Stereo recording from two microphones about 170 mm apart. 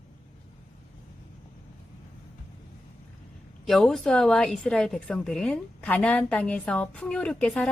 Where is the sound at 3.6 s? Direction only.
Centre (ahead or behind).